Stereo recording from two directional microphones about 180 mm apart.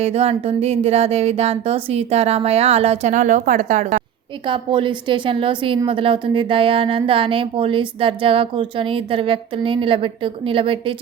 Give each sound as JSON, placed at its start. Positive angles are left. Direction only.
{"t": 0.0, "sound": "speech", "side_deg": -35}
{"t": 4.4, "sound": "a woman's voice", "side_deg": -30}